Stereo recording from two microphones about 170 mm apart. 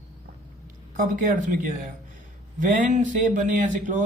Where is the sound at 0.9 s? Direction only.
50° right (ahead or behind).